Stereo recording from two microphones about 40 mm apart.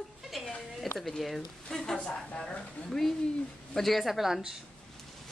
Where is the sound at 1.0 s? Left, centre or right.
Centre.